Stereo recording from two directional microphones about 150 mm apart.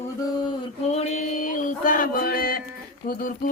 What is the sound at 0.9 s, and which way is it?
Mantra, 50° left (ahead or behind).